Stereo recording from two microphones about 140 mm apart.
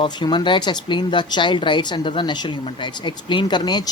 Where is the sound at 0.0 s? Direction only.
35° left (ahead or behind).